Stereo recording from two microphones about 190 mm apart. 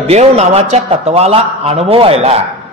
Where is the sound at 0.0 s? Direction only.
35° right (ahead or behind).